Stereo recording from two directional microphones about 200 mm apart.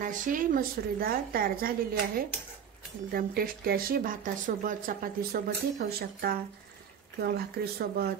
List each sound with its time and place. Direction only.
0.0 s speech: 40° right (ahead or behind)